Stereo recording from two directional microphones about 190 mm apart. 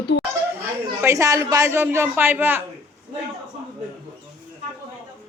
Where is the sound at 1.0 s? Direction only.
15° right (ahead or behind).